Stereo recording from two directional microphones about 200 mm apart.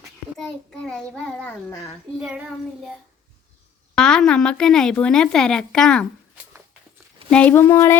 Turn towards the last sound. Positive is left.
turn(degrees=10)  # may be behind; listen again after turning